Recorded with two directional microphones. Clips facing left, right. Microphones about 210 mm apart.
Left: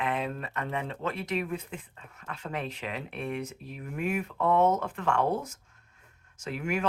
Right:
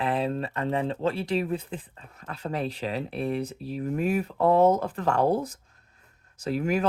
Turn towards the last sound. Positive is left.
turn(degrees=-35)  # may be behind; listen again after turning